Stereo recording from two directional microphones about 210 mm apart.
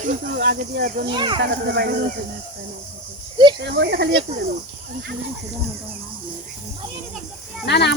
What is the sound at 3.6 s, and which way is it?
Speech, 55° right (ahead or behind).